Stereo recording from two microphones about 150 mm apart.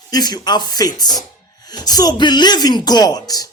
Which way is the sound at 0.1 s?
25° left (ahead or behind).